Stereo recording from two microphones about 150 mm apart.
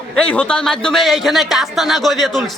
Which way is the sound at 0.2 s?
5° left (ahead or behind).